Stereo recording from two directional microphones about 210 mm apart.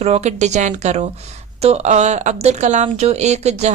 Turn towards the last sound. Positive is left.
turn(degrees=-30)  # may be behind; listen again after turning